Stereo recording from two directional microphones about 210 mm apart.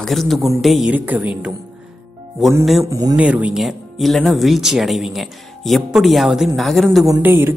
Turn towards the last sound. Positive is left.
turn(degrees=-10)  # may be behind; listen again after turning